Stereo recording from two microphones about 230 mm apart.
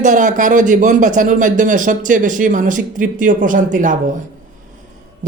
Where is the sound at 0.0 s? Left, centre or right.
Right.